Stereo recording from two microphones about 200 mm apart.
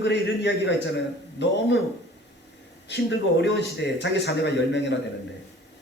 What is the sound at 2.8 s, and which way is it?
Speech, 60° left (ahead or behind).